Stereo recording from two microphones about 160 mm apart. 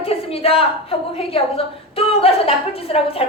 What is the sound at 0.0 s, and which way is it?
A woman's voice, 40° left (ahead or behind).